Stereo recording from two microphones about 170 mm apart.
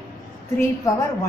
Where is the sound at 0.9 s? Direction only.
20° left (ahead or behind).